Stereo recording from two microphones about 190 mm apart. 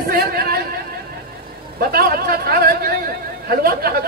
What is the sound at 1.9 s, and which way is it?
Speech, 50° right (ahead or behind).